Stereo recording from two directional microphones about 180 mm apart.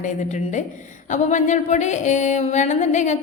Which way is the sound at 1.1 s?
40° left (ahead or behind).